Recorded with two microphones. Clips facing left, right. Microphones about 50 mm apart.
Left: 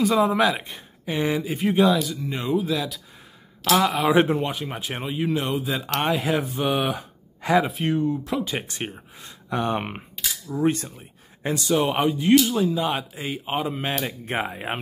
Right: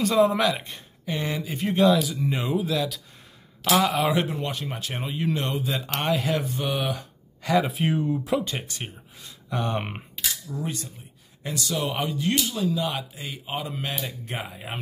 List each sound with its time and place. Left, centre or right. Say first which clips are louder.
0.0 s speech: left 1 dB; centre
4.1 s speech: left 7 dB; left
4.4 s speech: left 3 dB; centre
5.0 s speech: left 3 dB; centre
5.9 s speech: left 2 dB; centre
6.6 s speech: left 4 dB; left
7.6 s speech: left 2 dB; centre
8.3 s speech: right 1 dB; centre
8.6 s speech: left 5 dB; left
9.8 s speech: left 1 dB; centre
10.6 s speech: left 11 dB; left
11.4 s a man's voice: left 6 dB; left
12.1 s a man's voice: left 8 dB; centre
14.0 s speech: left 6 dB; left